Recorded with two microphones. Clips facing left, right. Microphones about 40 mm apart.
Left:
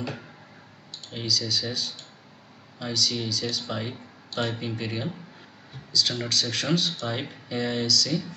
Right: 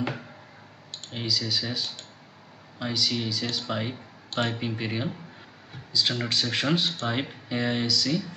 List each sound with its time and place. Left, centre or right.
1.1 s speech: centre